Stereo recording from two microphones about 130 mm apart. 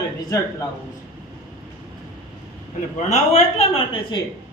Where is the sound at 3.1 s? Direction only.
55° left (ahead or behind).